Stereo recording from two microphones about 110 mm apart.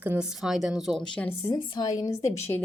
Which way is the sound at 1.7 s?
40° left (ahead or behind).